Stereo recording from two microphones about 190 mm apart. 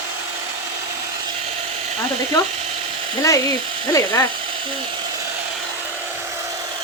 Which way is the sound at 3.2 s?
15° left (ahead or behind).